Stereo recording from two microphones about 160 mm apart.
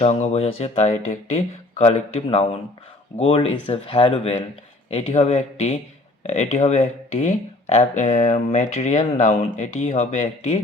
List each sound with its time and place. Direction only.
0.0 s speech: 40° left (ahead or behind)